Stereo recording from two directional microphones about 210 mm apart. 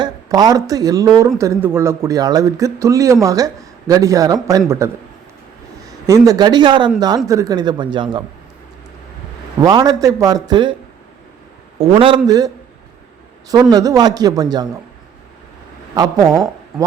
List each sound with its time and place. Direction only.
0.0 s speech: 20° right (ahead or behind)
6.1 s speech: 15° right (ahead or behind)
9.6 s speech: 20° right (ahead or behind)
11.8 s speech: 25° right (ahead or behind)
13.5 s speech: 15° right (ahead or behind)
16.0 s speech: 15° right (ahead or behind)